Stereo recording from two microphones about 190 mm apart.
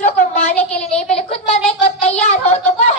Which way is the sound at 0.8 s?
35° left (ahead or behind).